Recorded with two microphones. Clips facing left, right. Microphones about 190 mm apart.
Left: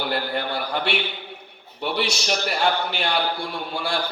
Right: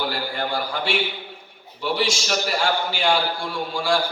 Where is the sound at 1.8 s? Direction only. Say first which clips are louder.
Right 2 dB; 60° left (ahead or behind).